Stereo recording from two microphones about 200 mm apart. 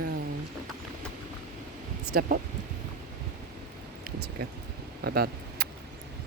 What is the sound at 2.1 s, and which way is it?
Speech, 45° right (ahead or behind).